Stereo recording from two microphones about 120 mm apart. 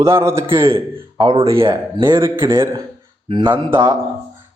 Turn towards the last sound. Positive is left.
turn(degrees=-20)  # may be behind; listen again after turning